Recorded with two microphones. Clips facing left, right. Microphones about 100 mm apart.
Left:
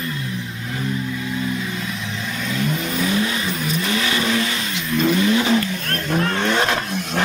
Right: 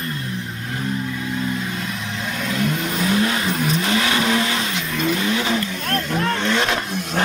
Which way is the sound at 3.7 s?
55° right (ahead or behind).